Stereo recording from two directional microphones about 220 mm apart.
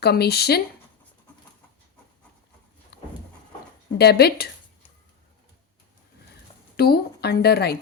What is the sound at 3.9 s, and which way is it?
Speech, 45° left (ahead or behind).